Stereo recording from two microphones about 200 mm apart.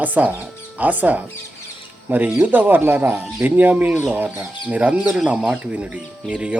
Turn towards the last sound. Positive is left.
turn(degrees=-5)  # may be behind; listen again after turning